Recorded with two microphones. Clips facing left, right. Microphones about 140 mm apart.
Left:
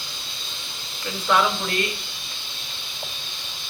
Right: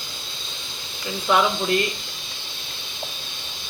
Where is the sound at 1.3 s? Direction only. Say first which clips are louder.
Right 1 dB; 10° right (ahead or behind).